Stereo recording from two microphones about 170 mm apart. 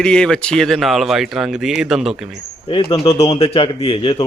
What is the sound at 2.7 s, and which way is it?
A man's voice, 30° left (ahead or behind).